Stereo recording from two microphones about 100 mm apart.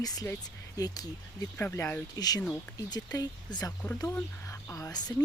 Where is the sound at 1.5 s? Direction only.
25° left (ahead or behind).